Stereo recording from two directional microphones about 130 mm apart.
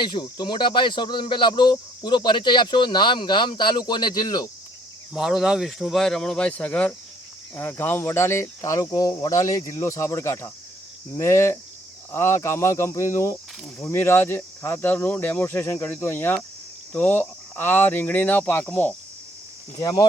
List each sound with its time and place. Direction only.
0.0 s speech: 35° left (ahead or behind)
5.1 s speech: 5° right (ahead or behind)